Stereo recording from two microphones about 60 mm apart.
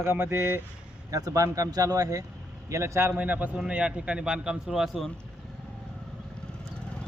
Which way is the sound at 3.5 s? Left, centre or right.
Centre.